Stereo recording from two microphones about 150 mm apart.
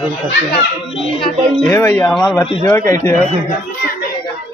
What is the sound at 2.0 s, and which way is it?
Speech, centre (ahead or behind).